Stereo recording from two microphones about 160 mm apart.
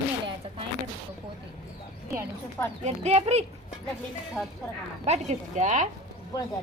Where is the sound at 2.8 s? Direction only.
40° right (ahead or behind).